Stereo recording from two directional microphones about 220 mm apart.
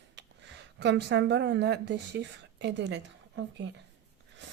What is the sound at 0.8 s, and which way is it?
A woman's voice, 55° right (ahead or behind).